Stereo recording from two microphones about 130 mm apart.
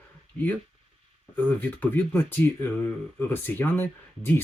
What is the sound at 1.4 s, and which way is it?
Speech, 15° left (ahead or behind).